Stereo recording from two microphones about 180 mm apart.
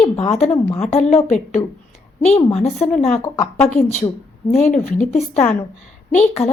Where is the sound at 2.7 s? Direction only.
5° left (ahead or behind).